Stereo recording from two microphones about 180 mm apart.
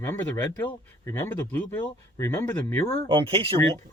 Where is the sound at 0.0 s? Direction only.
15° left (ahead or behind).